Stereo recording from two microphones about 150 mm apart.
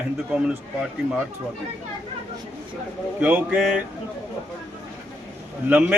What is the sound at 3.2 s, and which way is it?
Speech, 10° right (ahead or behind).